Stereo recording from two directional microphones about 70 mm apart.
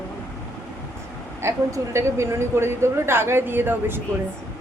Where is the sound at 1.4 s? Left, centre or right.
Right.